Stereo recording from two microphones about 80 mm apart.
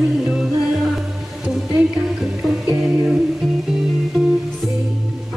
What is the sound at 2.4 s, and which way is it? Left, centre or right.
Music, centre.